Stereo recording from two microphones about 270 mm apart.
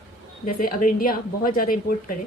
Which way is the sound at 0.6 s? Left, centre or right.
Left.